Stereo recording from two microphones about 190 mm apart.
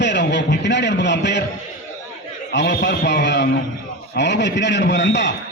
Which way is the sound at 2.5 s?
65° left (ahead or behind).